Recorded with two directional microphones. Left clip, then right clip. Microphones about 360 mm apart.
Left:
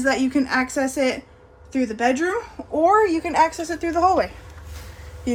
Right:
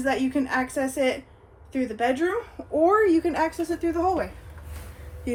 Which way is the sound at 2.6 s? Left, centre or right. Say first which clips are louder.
Left 3 dB; left.